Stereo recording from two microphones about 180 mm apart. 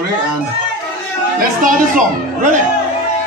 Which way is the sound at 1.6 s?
45° right (ahead or behind).